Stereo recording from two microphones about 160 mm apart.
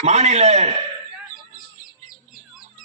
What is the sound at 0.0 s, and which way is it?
Speech, 45° right (ahead or behind).